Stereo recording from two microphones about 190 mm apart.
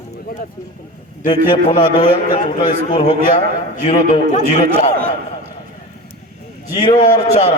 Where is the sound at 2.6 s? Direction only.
45° left (ahead or behind).